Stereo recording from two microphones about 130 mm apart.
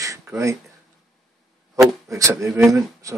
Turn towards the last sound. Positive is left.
turn(degrees=-25)  # may be behind; listen again after turning